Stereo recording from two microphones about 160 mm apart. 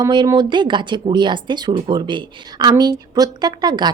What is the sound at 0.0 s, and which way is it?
Speech, 25° right (ahead or behind).